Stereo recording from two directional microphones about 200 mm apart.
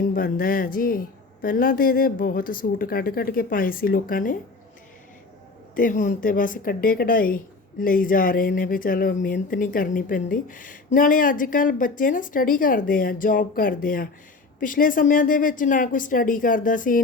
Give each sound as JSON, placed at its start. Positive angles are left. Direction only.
{"t": 0.0, "sound": "speech", "side_deg": 45}
{"t": 5.7, "sound": "speech", "side_deg": 40}